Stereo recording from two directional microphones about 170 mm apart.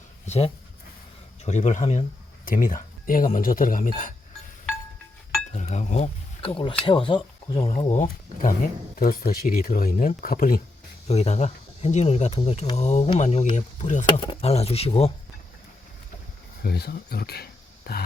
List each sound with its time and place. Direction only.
0.3 s speech: 40° left (ahead or behind)
5.5 s speech: 45° left (ahead or behind)
9.0 s speech: 60° left (ahead or behind)
11.1 s speech: 40° left (ahead or behind)
14.1 s speech: 30° left (ahead or behind)
16.6 s speech: 70° left (ahead or behind)